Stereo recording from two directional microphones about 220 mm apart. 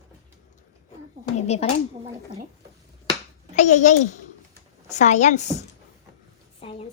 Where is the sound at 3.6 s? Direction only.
30° left (ahead or behind).